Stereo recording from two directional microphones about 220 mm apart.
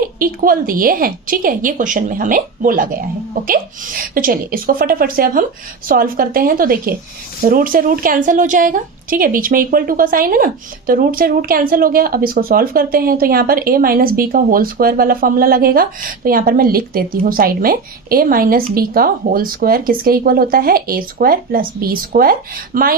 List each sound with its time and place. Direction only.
0.2 s a woman's voice: 40° right (ahead or behind)